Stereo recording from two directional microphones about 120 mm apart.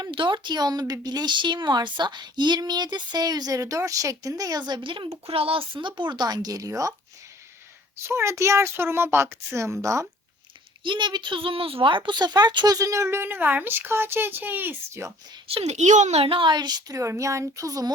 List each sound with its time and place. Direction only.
0.0 s speech: 40° right (ahead or behind)
8.0 s a woman's voice: 25° right (ahead or behind)
10.8 s a woman's voice: 40° right (ahead or behind); by 15.1 s 20° right (ahead or behind)
15.4 s speech: 60° right (ahead or behind); by 17.9 s 30° right (ahead or behind)